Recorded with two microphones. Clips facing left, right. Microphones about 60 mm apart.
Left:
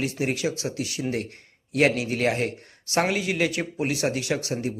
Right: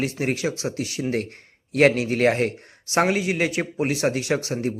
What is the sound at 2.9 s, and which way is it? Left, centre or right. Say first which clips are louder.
Speech: right 3 dB; right.